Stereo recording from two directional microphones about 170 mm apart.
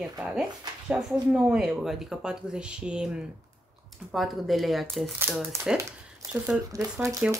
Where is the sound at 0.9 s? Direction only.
5° right (ahead or behind).